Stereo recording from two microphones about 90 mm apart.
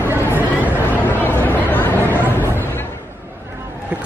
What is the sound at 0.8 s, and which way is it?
Chatter, 25° left (ahead or behind).